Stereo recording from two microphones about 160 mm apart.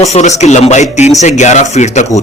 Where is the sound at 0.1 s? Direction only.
45° left (ahead or behind).